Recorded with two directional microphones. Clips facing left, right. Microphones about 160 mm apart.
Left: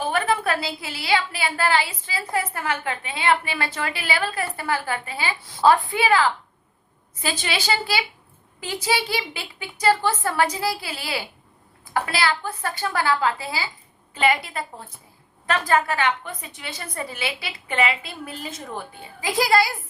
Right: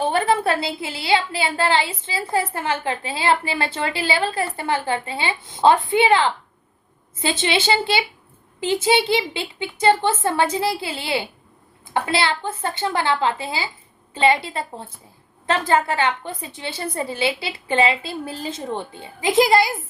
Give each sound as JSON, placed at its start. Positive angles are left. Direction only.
{"t": 0.0, "sound": "a woman's voice", "side_deg": -30}